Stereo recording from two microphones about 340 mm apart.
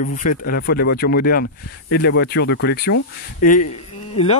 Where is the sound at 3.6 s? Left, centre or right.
Left.